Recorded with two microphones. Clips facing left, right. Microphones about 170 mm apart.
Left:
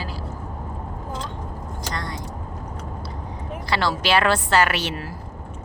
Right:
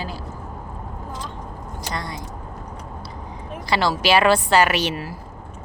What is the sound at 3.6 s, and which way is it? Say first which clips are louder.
A woman's voice: right 3 dB; 15° right (ahead or behind).